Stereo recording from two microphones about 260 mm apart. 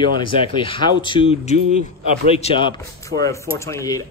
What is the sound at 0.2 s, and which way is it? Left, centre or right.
A man's voice, centre.